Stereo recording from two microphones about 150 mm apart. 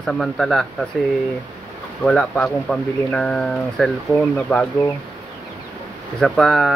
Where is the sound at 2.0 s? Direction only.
5° left (ahead or behind).